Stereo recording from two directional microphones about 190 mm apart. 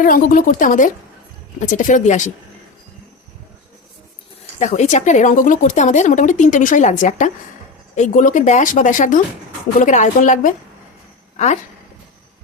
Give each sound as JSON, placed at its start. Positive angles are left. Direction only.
{"t": 0.0, "sound": "speech", "side_deg": 45}
{"t": 4.6, "sound": "speech", "side_deg": 40}